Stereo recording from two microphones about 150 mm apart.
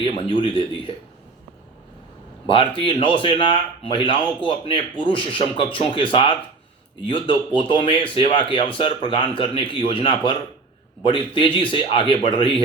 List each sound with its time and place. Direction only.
0.0 s speech: 35° left (ahead or behind)
2.5 s speech: 35° left (ahead or behind)